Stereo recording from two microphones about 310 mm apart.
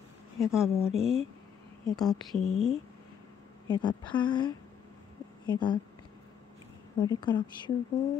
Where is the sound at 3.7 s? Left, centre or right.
Centre.